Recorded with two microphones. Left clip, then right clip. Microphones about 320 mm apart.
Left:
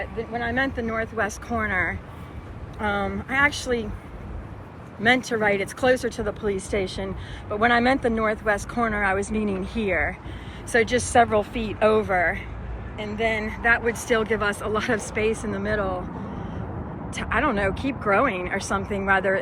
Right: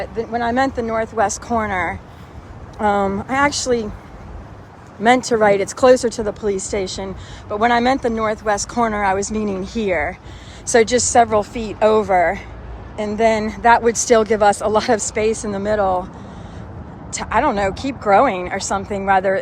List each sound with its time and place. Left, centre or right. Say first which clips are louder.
0.0 s speech: right 7 dB; right
0.6 s speech: right 7 dB; centre
5.0 s speech: right 7 dB; centre
13.1 s speech: right 9 dB; right
13.7 s speech: right 9 dB; centre
17.1 s speech: right 6 dB; centre